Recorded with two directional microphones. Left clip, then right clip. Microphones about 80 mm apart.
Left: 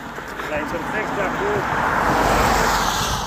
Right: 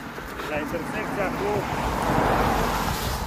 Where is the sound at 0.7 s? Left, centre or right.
Left.